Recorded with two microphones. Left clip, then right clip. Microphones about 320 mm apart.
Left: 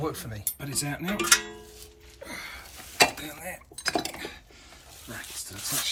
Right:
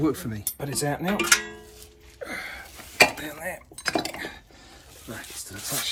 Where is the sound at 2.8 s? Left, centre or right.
Centre.